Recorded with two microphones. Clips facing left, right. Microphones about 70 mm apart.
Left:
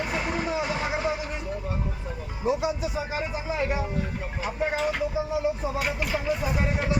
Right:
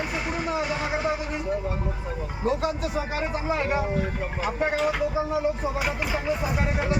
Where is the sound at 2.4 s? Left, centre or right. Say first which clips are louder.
Even; centre.